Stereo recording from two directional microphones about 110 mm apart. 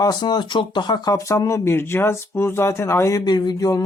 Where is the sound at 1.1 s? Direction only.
30° left (ahead or behind).